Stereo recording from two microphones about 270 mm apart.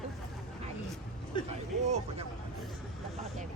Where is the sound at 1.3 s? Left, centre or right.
Centre.